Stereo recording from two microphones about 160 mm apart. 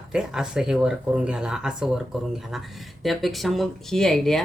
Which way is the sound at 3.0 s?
Centre (ahead or behind).